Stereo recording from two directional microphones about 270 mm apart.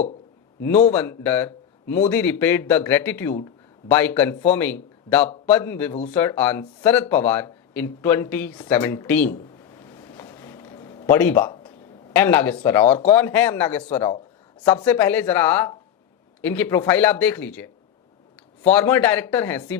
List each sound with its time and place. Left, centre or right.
0.9 s a man's voice: centre
9.8 s a sound: centre
12.1 s speech: centre
13.8 s speech: centre
18.7 s speech: centre